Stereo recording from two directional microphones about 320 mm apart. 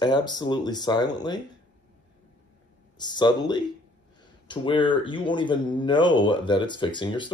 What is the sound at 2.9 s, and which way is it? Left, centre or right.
Speech, centre.